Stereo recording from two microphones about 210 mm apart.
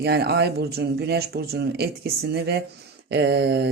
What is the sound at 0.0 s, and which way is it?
Speech, 50° right (ahead or behind).